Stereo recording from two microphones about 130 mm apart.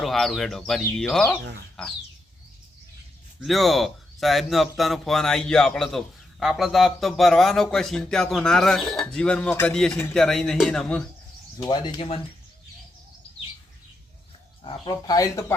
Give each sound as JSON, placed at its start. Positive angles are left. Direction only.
{"t": 0.0, "sound": "speech", "side_deg": 0}
{"t": 3.4, "sound": "speech", "side_deg": 0}
{"t": 11.6, "sound": "speech", "side_deg": 35}
{"t": 11.9, "sound": "speech", "side_deg": 45}
{"t": 14.6, "sound": "speech", "side_deg": 30}